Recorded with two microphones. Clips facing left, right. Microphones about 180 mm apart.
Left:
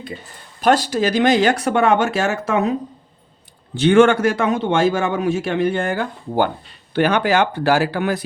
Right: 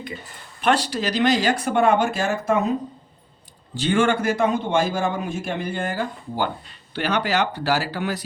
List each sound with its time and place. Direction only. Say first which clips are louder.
0.6 s a man's voice: left 5 dB; 40° left (ahead or behind); by 2.7 s 85° left
3.8 s a man's voice: left 8 dB; 75° left (ahead or behind); by 8.2 s 55° left (ahead or behind)